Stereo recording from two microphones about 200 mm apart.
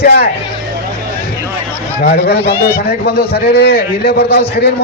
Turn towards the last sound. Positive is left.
turn(degrees=55)  # may be behind; listen again after turning